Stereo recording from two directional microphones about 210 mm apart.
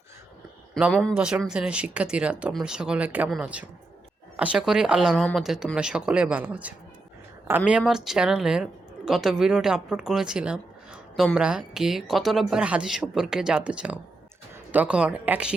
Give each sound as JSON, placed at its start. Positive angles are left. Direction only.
{"t": 0.7, "sound": "speech", "side_deg": 0}